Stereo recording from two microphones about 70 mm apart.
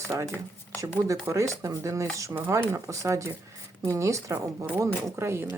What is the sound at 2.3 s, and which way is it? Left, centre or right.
Speech, right.